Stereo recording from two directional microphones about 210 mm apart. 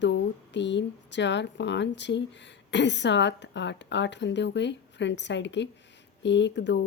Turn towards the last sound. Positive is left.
turn(degrees=55)  # may be behind; listen again after turning